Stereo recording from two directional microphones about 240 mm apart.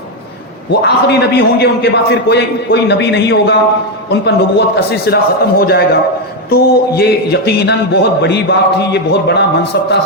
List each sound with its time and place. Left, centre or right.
0.7 s a man's voice: left